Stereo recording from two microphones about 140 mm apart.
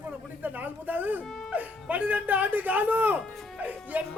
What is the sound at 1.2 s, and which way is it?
Speech, 5° left (ahead or behind).